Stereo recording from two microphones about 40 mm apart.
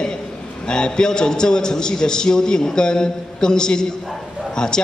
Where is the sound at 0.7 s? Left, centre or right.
Left.